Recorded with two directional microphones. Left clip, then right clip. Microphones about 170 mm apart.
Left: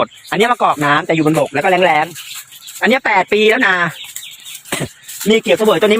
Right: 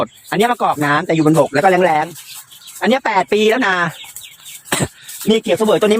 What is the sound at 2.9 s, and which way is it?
Speech, 15° right (ahead or behind).